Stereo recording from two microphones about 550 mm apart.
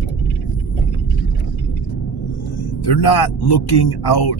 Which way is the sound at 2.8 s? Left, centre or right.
Left.